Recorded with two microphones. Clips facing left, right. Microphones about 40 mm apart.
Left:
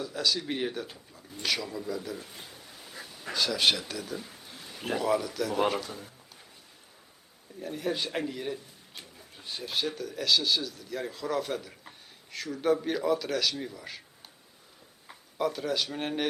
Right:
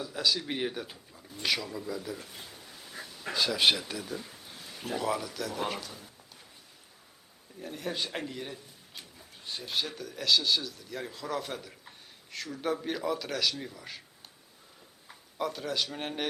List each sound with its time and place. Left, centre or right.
0.0 s speech: centre
2.6 s duck: centre
3.3 s speech: centre
4.1 s a sound: centre
4.9 s speech: centre
5.8 s speech: left
7.6 s speech: centre
15.4 s speech: centre